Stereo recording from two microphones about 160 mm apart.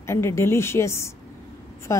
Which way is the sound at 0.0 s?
15° left (ahead or behind).